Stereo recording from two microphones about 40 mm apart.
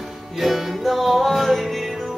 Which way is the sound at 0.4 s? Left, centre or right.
Centre.